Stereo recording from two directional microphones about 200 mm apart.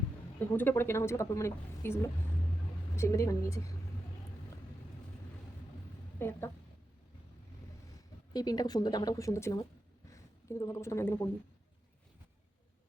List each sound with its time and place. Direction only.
0.3 s speech: 10° left (ahead or behind)
6.1 s speech: 10° left (ahead or behind)
8.3 s speech: 20° left (ahead or behind)